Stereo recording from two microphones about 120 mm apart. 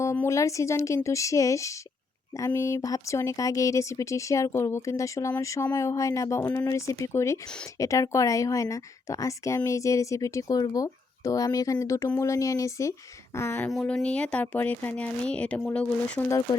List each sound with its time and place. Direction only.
0.2 s speech: 25° left (ahead or behind)
13.8 s speech: 10° left (ahead or behind)